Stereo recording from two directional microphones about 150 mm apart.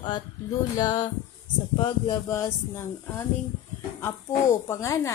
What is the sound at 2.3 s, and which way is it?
Speech, 20° left (ahead or behind).